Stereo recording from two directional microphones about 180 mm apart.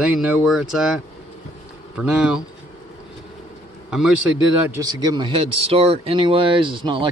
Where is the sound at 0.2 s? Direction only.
5° right (ahead or behind).